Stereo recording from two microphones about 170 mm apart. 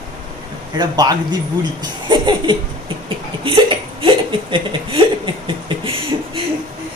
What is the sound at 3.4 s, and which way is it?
Hiccup, 30° right (ahead or behind).